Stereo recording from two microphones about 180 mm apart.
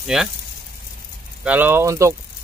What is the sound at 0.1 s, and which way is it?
Speech, centre (ahead or behind).